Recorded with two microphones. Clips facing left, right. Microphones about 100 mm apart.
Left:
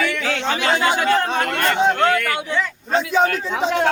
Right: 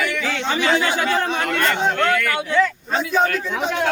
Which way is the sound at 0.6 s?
40° left (ahead or behind).